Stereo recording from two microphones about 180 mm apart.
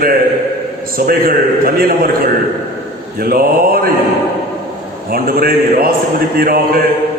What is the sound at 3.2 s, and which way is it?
Speech, 55° right (ahead or behind).